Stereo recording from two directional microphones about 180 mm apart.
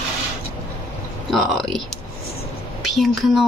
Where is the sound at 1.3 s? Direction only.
Centre (ahead or behind).